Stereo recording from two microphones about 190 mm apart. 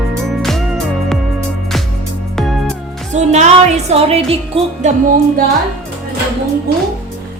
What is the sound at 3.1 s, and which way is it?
Speech, 40° right (ahead or behind).